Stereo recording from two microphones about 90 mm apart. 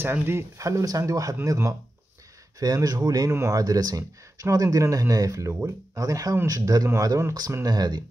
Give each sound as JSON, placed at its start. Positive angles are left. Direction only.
{"t": 0.0, "sound": "speech", "side_deg": -25}
{"t": 3.3, "sound": "speech", "side_deg": -30}
{"t": 3.5, "sound": "speech", "side_deg": -40}